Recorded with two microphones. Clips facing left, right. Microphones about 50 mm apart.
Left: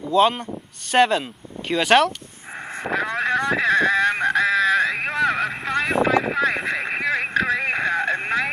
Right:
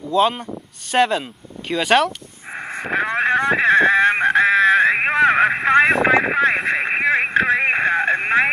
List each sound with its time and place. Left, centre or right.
0.1 s speech: centre
2.5 s vehicle: right
5.1 s vehicle: right
6.7 s a sound: right